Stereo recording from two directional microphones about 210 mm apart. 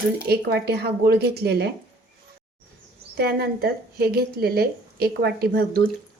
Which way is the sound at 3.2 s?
50° right (ahead or behind).